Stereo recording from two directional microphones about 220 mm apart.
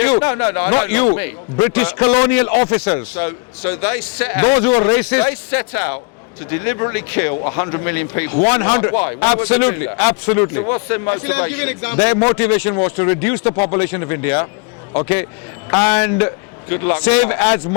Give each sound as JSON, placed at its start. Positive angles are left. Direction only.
{"t": 0.2, "sound": "a man's voice", "side_deg": 20}
{"t": 15.7, "sound": "a man's voice", "side_deg": 15}